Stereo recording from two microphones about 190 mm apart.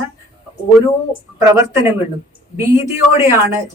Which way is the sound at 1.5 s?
10° right (ahead or behind).